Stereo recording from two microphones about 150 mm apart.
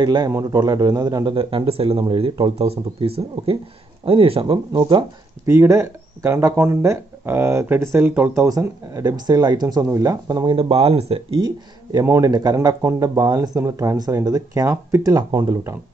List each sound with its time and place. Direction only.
0.0 s speech: 30° right (ahead or behind)
0.3 s a man's voice: 20° right (ahead or behind); by 5.0 s 35° right (ahead or behind)
5.5 s speech: 20° right (ahead or behind)
8.5 s speech: 25° right (ahead or behind)